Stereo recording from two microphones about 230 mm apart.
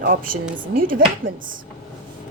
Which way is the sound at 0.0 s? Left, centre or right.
Right.